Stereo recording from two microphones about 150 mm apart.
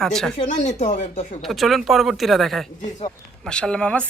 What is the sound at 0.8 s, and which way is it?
Speech, 45° left (ahead or behind).